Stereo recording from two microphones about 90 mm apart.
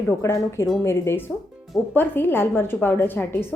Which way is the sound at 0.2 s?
30° left (ahead or behind).